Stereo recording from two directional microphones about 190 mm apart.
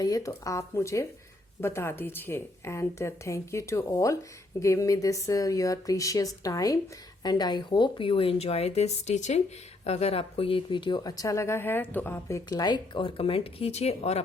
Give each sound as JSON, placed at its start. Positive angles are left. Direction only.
{"t": 0.0, "sound": "speech", "side_deg": 20}